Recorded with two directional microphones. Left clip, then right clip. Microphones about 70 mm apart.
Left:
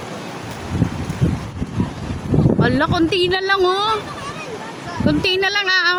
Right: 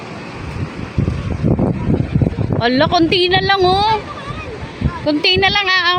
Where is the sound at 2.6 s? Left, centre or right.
Right.